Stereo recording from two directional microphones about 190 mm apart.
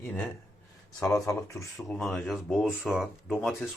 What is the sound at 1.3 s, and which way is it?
Speech, 15° left (ahead or behind).